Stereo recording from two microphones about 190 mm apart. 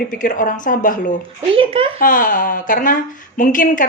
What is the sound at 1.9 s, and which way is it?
Speech, 45° left (ahead or behind).